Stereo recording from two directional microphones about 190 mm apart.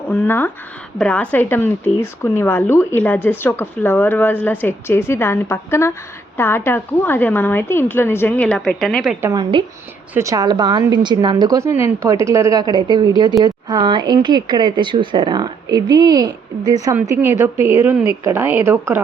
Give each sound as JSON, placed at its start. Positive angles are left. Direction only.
{"t": 0.1, "sound": "speech", "side_deg": 10}
{"t": 9.3, "sound": "speech", "side_deg": -25}